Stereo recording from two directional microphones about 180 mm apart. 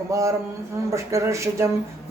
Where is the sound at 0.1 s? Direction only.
15° right (ahead or behind).